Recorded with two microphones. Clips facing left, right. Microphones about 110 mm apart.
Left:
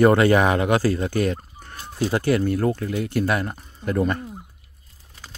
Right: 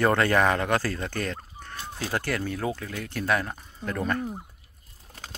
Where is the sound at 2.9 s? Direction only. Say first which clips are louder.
Left 10 dB; 20° left (ahead or behind).